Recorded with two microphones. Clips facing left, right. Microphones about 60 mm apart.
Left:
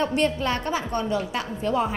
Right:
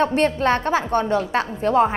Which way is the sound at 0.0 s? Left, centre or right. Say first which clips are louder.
Right 5 dB; right.